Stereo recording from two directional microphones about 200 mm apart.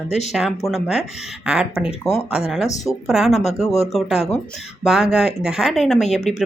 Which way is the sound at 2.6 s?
15° left (ahead or behind).